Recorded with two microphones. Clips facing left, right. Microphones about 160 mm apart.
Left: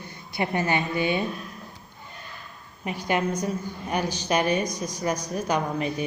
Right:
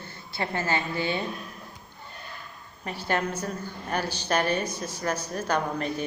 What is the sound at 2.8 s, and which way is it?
A woman's voice, 15° left (ahead or behind).